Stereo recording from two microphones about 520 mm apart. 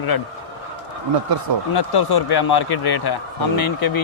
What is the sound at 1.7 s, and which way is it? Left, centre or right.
Speech, left.